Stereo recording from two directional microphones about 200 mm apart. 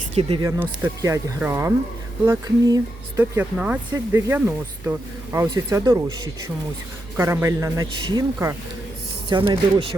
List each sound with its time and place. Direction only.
0.1 s speech: 30° right (ahead or behind)
0.4 s speech: 10° right (ahead or behind)
7.2 s speech: 10° right (ahead or behind)